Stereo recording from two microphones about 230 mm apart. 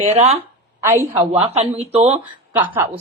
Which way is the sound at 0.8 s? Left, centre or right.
Centre.